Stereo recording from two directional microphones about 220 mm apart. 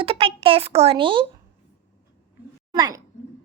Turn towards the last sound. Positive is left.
turn(degrees=-15)  # may be behind; listen again after turning